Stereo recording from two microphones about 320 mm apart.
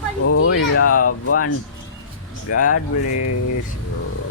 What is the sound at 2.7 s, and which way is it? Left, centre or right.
Speech, left.